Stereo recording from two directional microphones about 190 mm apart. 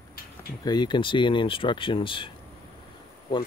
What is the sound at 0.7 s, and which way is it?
Speech, 25° left (ahead or behind).